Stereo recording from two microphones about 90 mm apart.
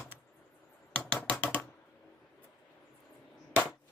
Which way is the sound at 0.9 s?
15° left (ahead or behind).